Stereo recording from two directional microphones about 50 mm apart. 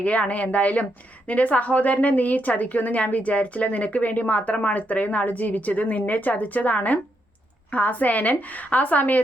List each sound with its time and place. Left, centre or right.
0.0 s a woman's voice: left